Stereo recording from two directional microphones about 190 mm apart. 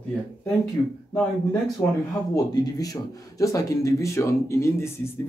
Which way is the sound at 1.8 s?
15° left (ahead or behind).